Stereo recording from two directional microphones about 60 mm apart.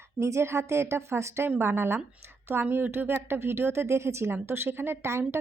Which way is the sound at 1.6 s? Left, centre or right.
Right.